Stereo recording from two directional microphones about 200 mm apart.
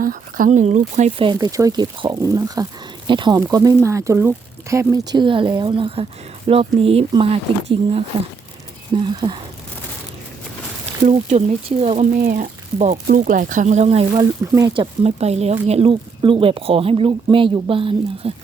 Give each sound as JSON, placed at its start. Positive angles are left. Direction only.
{"t": 0.0, "sound": "speech", "side_deg": -45}
{"t": 1.3, "sound": "speech", "side_deg": -15}
{"t": 11.0, "sound": "speech", "side_deg": -35}
{"t": 12.2, "sound": "speech", "side_deg": -40}